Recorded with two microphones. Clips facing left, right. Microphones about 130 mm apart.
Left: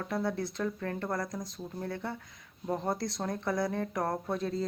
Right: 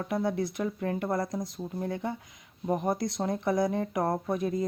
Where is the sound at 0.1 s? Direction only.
20° right (ahead or behind).